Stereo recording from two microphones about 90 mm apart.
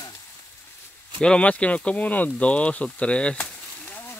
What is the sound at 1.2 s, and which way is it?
Speech, 10° left (ahead or behind).